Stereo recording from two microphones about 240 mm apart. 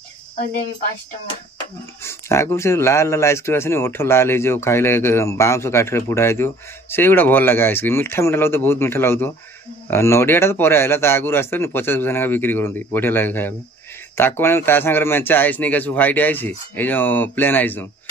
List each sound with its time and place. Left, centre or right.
2.0 s speech: centre